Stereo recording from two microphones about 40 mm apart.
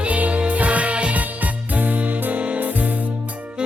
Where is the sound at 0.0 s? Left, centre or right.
Right.